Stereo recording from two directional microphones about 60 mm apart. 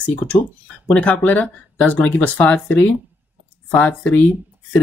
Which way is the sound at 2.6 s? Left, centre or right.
Left.